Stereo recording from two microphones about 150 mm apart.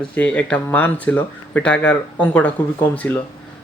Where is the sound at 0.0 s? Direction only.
5° left (ahead or behind).